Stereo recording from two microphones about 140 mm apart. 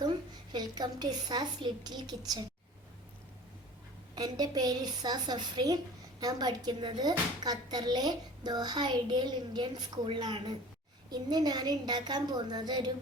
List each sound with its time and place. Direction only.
0.0 s a woman's voice: 30° right (ahead or behind)
4.1 s a woman's voice: 30° right (ahead or behind)